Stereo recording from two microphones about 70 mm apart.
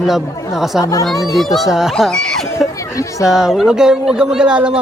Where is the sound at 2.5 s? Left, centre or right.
Left.